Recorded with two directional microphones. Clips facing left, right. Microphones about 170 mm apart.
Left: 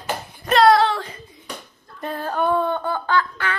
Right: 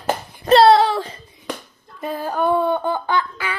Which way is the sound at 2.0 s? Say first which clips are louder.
Right 2 dB; 5° right (ahead or behind).